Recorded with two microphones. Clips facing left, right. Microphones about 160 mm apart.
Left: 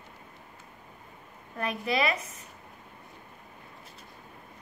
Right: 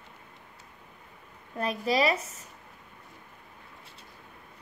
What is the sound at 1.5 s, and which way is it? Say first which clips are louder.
Speech: right 2 dB; 35° right (ahead or behind).